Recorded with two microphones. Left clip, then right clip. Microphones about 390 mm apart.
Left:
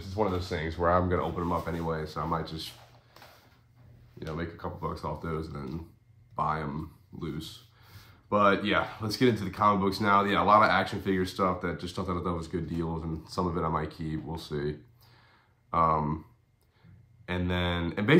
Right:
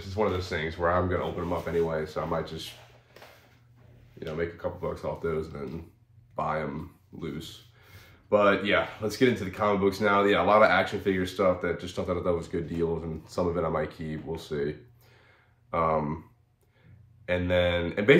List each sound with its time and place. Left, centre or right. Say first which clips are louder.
0.1 s speech: right 2 dB; left
4.4 s speech: right 6 dB; centre
17.3 s speech: right 7 dB; centre